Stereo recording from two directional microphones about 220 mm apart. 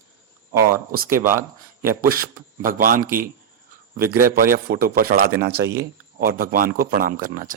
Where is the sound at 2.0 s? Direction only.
40° right (ahead or behind).